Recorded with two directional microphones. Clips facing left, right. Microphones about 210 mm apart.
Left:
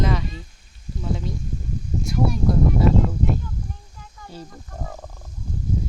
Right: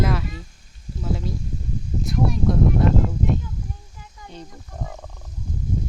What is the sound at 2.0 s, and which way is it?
Speech, centre (ahead or behind).